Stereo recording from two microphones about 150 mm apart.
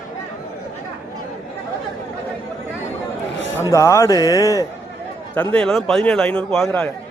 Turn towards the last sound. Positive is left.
turn(degrees=5)  # may be behind; listen again after turning